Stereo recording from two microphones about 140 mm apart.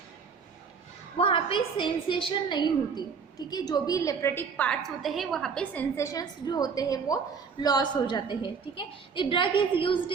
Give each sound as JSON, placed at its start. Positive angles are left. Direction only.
{"t": 1.2, "sound": "a woman's voice", "side_deg": 40}
{"t": 6.0, "sound": "a woman's voice", "side_deg": 25}